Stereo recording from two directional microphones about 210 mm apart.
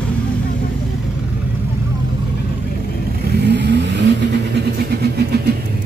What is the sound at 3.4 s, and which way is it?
Vehicle, 55° right (ahead or behind).